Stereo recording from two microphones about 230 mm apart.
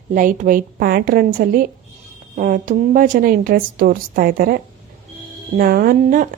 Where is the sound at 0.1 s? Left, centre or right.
Right.